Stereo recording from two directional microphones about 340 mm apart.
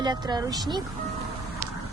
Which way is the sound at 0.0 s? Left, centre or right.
Centre.